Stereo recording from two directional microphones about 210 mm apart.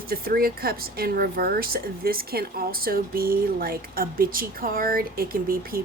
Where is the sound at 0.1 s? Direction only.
45° right (ahead or behind).